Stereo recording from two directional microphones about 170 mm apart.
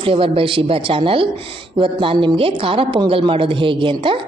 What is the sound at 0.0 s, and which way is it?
A woman's voice, 30° right (ahead or behind).